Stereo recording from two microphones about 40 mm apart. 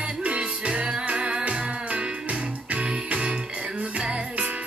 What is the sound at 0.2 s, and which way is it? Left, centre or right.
Music, right.